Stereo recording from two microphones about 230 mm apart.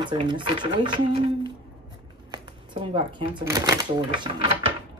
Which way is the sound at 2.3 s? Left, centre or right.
Right.